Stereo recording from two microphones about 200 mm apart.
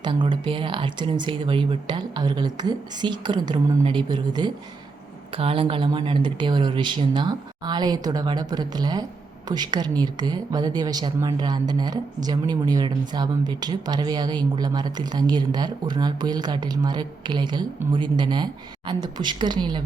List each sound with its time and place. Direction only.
0.0 s a woman's voice: 25° right (ahead or behind)